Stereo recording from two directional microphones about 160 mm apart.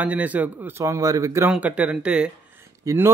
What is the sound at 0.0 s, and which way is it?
A man's voice, 10° right (ahead or behind).